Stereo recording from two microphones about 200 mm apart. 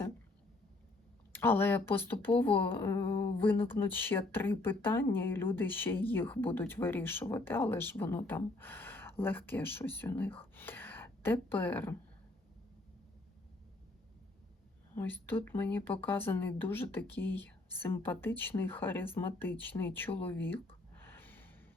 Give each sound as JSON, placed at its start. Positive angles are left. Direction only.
{"t": 1.3, "sound": "speech", "side_deg": 10}
{"t": 14.9, "sound": "speech", "side_deg": 10}
{"t": 20.1, "sound": "a sound", "side_deg": 10}